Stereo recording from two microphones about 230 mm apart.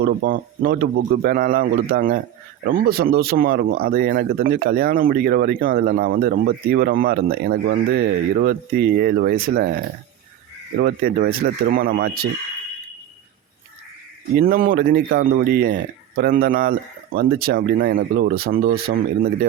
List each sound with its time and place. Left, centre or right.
0.0 s speech: right
10.8 s speech: right
14.3 s speech: right